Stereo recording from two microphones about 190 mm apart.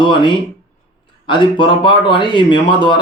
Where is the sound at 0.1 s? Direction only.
25° left (ahead or behind).